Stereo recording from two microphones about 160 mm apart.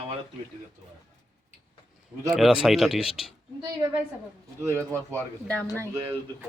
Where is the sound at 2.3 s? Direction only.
5° right (ahead or behind).